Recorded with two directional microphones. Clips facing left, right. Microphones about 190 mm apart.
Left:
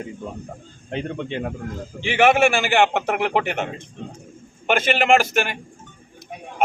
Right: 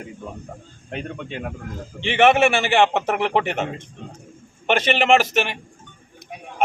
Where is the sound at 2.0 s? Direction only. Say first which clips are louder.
Right 1 dB; centre (ahead or behind).